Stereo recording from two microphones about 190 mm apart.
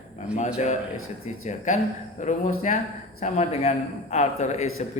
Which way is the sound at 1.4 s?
40° left (ahead or behind).